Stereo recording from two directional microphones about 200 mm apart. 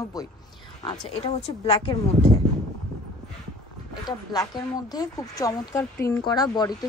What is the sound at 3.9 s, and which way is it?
A woman's voice, 20° left (ahead or behind).